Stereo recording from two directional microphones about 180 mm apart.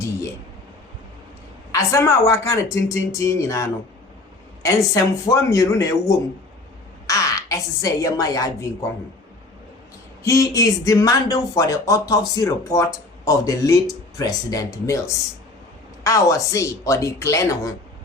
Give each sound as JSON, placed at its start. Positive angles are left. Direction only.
{"t": 1.7, "sound": "speech", "side_deg": 15}
{"t": 10.2, "sound": "speech", "side_deg": 20}